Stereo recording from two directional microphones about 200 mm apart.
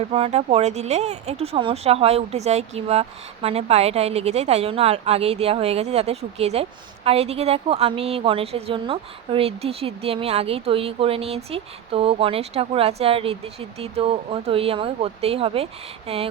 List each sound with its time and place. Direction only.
0.1 s speech: 30° right (ahead or behind)